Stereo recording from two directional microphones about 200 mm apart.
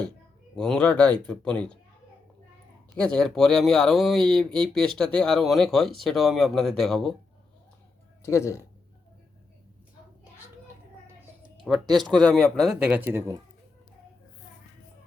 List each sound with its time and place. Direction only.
0.5 s speech: 5° left (ahead or behind)
2.9 s speech: 5° left (ahead or behind)
8.2 s speech: 15° left (ahead or behind)
11.6 s speech: centre (ahead or behind)